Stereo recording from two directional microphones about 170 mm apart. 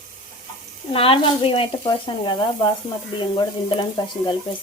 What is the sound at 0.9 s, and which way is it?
Sizzle, 30° left (ahead or behind).